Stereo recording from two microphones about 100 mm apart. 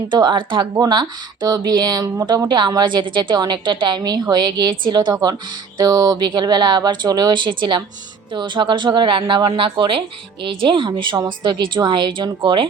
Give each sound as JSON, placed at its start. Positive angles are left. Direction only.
{"t": 0.1, "sound": "a woman's voice", "side_deg": -50}